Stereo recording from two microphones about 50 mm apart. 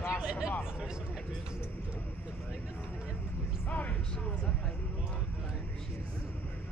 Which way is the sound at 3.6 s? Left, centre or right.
Left.